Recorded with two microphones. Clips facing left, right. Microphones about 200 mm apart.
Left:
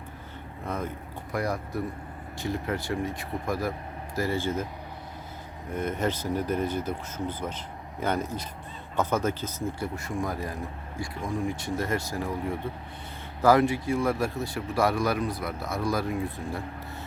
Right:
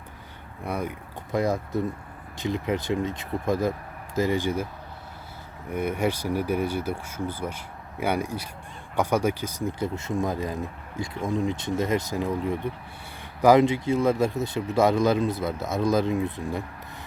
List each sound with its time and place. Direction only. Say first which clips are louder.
0.6 s speech: right 3 dB; 10° right (ahead or behind)
1.3 s speech: right 5 dB; 20° right (ahead or behind)
5.7 s speech: right 3 dB; 10° right (ahead or behind)